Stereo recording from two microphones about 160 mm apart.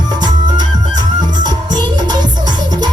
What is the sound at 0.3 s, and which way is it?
Music, 25° right (ahead or behind).